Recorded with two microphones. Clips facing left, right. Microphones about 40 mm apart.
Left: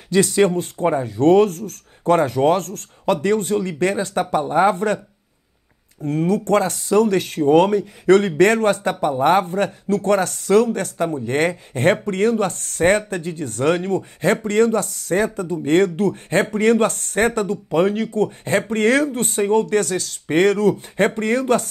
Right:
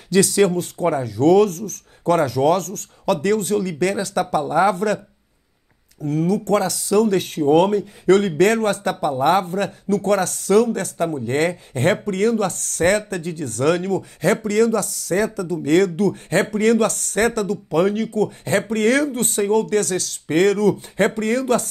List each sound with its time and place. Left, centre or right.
0.1 s speech: left
6.0 s speech: left